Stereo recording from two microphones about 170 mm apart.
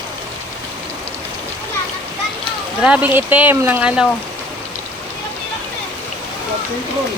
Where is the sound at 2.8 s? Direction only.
10° right (ahead or behind).